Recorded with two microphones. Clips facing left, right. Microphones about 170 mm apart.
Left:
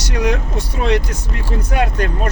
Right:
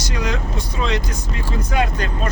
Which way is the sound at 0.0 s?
65° left (ahead or behind).